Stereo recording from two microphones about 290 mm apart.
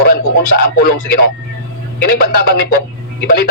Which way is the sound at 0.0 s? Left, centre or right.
Left.